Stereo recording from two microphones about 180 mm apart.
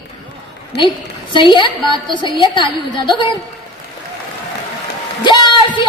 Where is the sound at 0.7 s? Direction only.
70° left (ahead or behind).